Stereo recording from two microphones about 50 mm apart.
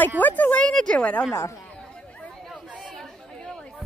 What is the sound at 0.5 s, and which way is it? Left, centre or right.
Speech, left.